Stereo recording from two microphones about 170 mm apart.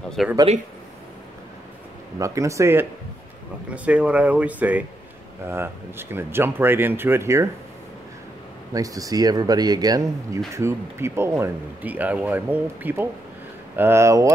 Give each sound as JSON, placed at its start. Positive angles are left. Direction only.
{"t": 0.2, "sound": "speech", "side_deg": 0}
{"t": 2.1, "sound": "speech", "side_deg": -20}
{"t": 8.7, "sound": "speech", "side_deg": -20}